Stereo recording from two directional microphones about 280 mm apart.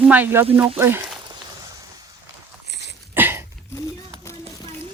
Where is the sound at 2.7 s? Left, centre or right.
Left.